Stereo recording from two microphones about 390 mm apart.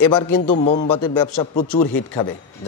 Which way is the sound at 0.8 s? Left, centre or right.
Left.